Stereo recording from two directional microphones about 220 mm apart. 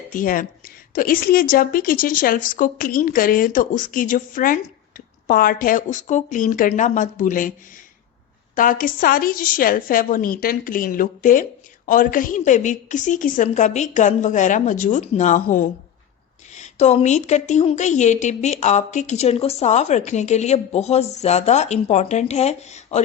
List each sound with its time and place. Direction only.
0.1 s a woman's voice: 40° left (ahead or behind)
8.5 s a woman's voice: 35° left (ahead or behind)